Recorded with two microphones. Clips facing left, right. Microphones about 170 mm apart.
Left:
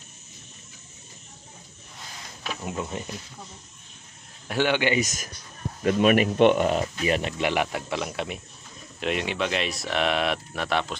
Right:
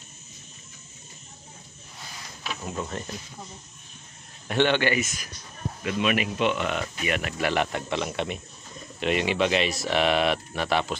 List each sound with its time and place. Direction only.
2.6 s speech: 10° left (ahead or behind)
4.5 s speech: 10° left (ahead or behind)
5.0 s speech: 40° left (ahead or behind)
7.1 s speech: 25° left (ahead or behind)
7.5 s speech: 5° left (ahead or behind)